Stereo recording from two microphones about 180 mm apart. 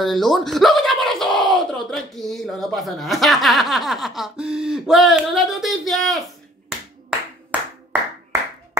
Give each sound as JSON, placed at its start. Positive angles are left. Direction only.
{"t": 0.0, "sound": "speech", "side_deg": 0}
{"t": 7.5, "sound": "clapping", "side_deg": -5}